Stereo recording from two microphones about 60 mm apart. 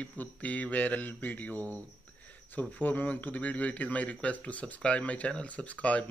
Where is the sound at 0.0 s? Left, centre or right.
Left.